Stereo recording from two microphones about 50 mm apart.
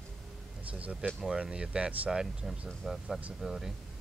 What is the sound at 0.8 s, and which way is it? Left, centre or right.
Speech, right.